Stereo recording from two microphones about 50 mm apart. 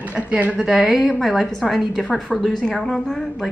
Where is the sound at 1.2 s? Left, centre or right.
Centre.